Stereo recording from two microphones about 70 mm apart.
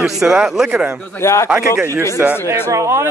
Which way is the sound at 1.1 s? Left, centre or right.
Left.